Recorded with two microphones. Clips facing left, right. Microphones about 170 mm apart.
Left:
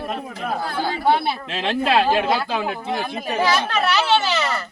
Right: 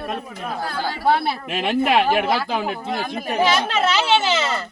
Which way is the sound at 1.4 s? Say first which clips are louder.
Right 2 dB; 10° right (ahead or behind).